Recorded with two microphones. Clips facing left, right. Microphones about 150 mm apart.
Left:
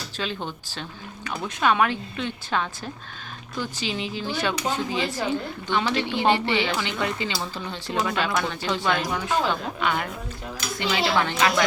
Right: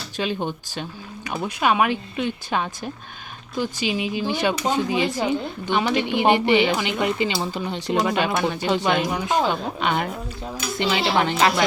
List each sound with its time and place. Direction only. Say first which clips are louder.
0.2 s speech: right 6 dB; 15° right (ahead or behind)